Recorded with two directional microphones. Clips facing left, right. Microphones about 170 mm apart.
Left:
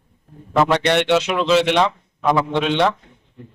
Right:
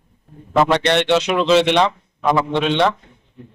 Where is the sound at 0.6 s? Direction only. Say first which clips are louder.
Right 1 dB; 10° left (ahead or behind).